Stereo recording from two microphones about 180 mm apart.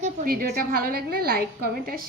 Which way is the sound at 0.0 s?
50° right (ahead or behind).